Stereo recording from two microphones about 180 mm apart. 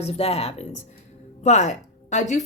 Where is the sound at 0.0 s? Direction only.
35° left (ahead or behind).